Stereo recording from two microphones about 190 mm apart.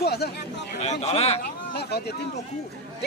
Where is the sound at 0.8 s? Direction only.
35° left (ahead or behind).